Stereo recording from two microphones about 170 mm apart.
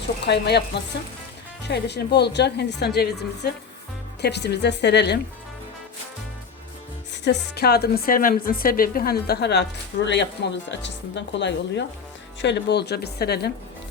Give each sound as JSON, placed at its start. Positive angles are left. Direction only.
{"t": 0.3, "sound": "a woman's voice", "side_deg": 80}
{"t": 1.6, "sound": "a woman's voice", "side_deg": 85}
{"t": 7.1, "sound": "speech", "side_deg": 80}